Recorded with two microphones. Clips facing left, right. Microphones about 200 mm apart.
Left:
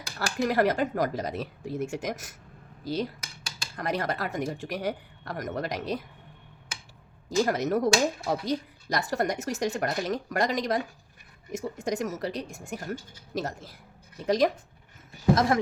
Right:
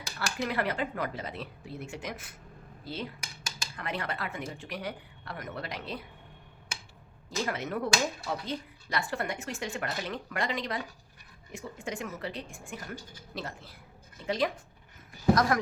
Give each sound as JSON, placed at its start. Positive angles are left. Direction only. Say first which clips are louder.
{"t": 0.2, "sound": "speech", "louder": "left 7 dB", "side_deg": 40}
{"t": 7.3, "sound": "speech", "louder": "left 8 dB", "side_deg": 40}